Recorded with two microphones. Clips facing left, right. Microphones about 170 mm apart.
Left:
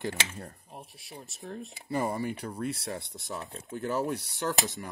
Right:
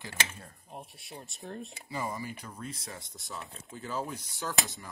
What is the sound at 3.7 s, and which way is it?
Speech, 70° left (ahead or behind).